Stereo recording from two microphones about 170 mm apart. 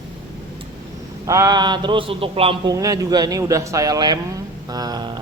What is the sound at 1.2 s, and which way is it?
A man's voice, 20° right (ahead or behind).